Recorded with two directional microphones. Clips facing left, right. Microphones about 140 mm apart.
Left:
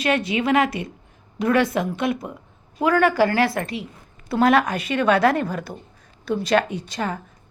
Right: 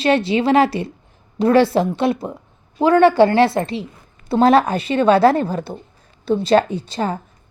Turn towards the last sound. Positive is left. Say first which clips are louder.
# right 4 dB
turn(degrees=-30)  # may be behind; listen again after turning